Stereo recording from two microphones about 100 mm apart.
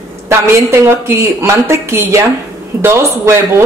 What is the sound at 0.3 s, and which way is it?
A man's voice, 25° right (ahead or behind).